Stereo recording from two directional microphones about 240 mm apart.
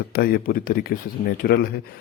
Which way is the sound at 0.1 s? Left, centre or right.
Left.